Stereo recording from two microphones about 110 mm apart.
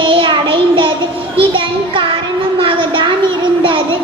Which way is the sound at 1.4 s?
55° right (ahead or behind).